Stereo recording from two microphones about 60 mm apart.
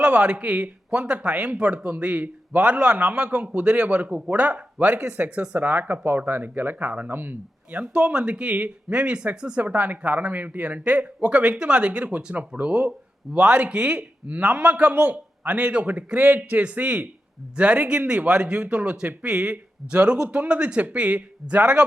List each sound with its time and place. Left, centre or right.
0.0 s a man's voice: right
7.7 s speech: right